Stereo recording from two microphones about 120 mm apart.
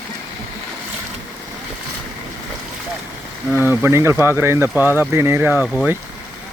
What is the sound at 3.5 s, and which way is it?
Speech, 15° right (ahead or behind).